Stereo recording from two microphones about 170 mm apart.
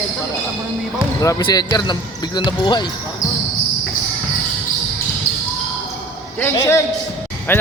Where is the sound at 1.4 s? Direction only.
25° left (ahead or behind).